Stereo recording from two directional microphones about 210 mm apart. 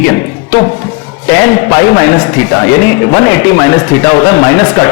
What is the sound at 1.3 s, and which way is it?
A man's voice, 10° left (ahead or behind).